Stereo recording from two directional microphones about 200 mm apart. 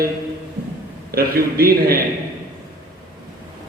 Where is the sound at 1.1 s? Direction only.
50° right (ahead or behind).